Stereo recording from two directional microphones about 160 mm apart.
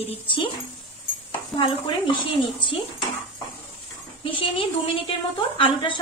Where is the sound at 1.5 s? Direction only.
30° left (ahead or behind).